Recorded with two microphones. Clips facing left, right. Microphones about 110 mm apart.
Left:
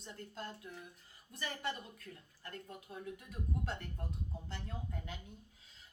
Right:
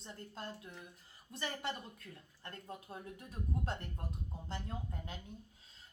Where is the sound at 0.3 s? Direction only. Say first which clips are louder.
Even; 30° right (ahead or behind).